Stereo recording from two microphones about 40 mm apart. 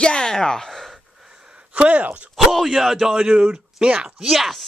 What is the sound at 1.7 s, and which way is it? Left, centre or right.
Speech, right.